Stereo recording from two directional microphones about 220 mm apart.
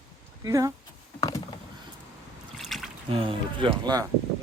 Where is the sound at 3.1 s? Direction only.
25° right (ahead or behind).